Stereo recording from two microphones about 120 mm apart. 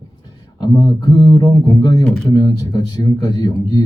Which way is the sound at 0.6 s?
35° left (ahead or behind).